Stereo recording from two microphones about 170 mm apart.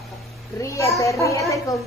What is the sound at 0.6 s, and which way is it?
A child's voice, 20° left (ahead or behind).